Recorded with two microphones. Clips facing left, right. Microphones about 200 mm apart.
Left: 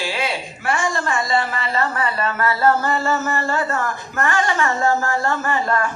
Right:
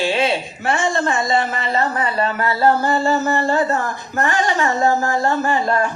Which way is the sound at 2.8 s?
30° right (ahead or behind).